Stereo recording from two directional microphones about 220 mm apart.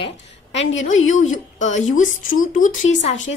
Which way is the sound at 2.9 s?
30° left (ahead or behind).